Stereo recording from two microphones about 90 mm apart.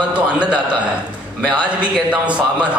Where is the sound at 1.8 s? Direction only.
10° right (ahead or behind).